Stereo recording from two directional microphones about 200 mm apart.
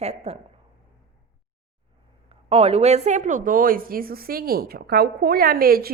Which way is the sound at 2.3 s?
30° right (ahead or behind).